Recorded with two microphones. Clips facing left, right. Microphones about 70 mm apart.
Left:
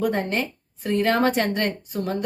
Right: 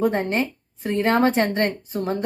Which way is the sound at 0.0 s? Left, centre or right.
Right.